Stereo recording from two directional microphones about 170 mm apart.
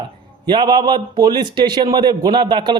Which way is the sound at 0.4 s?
25° right (ahead or behind).